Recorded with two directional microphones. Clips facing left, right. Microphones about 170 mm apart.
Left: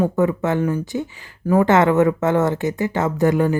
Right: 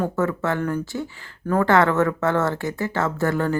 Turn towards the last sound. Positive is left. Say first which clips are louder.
# left 5 dB
turn(degrees=15)  # may be behind; listen again after turning